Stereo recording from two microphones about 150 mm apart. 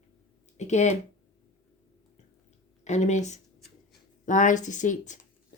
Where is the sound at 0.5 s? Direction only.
50° left (ahead or behind).